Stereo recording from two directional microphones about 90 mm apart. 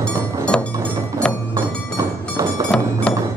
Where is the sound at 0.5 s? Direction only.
10° left (ahead or behind).